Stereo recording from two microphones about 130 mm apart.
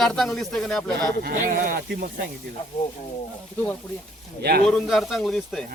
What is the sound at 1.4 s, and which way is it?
Speech, 90° right.